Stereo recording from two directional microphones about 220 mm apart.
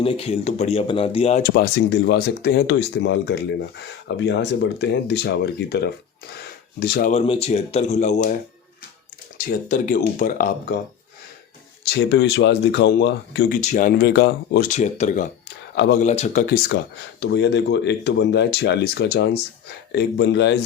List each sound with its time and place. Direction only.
0.0 s speech: 25° left (ahead or behind); by 7.1 s 45° left (ahead or behind)
7.1 s speech: 25° left (ahead or behind)
9.5 s speech: 40° left (ahead or behind)
11.9 s speech: 50° left (ahead or behind)
13.6 s speech: 35° left (ahead or behind)
15.7 s speech: 50° left (ahead or behind)
16.0 s speech: 30° left (ahead or behind); by 20.6 s 50° left (ahead or behind)